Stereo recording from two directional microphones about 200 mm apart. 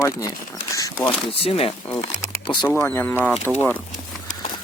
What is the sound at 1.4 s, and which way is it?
Speech, 30° left (ahead or behind).